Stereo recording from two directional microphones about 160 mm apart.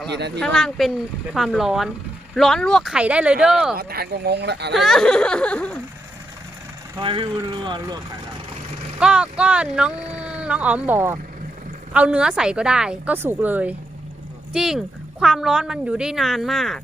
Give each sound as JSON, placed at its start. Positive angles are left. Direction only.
{"t": 0.1, "sound": "speech", "side_deg": -90}
{"t": 0.3, "sound": "speech", "side_deg": 5}
{"t": 3.8, "sound": "speech", "side_deg": -75}
{"t": 4.7, "sound": "speech", "side_deg": 0}
{"t": 7.0, "sound": "speech", "side_deg": -30}
{"t": 9.0, "sound": "a woman's voice", "side_deg": -5}